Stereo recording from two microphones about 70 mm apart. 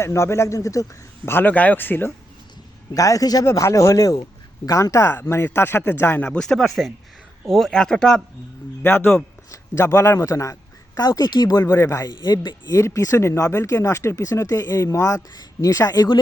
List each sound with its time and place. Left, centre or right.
0.0 s speech: left
1.3 s speech: left
2.9 s speech: left
3.5 s speech: left
5.1 s speech: left
6.2 s speech: centre
8.8 s a man's voice: left
11.7 s speech: left
12.6 s speech: left